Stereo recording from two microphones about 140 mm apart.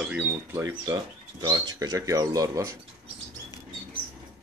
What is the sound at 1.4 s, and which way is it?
Speech, 30° right (ahead or behind).